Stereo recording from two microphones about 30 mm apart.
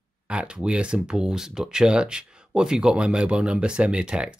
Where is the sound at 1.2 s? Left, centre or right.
Right.